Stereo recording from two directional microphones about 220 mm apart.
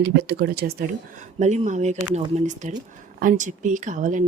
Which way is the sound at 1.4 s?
30° right (ahead or behind).